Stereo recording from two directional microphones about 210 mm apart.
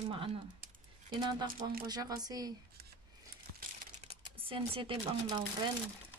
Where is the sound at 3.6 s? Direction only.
35° right (ahead or behind).